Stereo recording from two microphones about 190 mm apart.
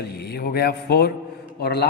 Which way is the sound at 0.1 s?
60° left (ahead or behind).